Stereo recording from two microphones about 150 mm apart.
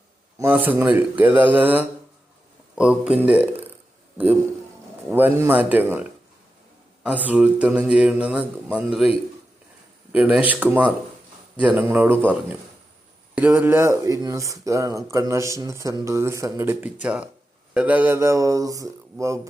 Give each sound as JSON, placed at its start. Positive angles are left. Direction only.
{"t": 0.3, "sound": "a man's voice", "side_deg": -15}
{"t": 5.1, "sound": "speech", "side_deg": -15}
{"t": 17.0, "sound": "speech", "side_deg": -5}